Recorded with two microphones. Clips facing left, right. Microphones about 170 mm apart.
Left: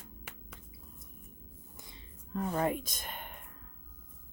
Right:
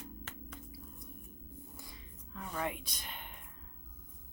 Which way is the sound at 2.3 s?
40° left (ahead or behind).